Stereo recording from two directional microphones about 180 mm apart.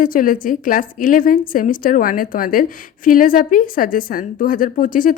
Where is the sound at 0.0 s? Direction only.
50° left (ahead or behind).